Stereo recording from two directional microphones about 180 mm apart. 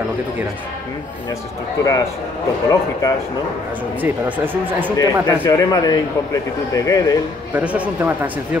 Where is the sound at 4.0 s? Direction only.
10° right (ahead or behind).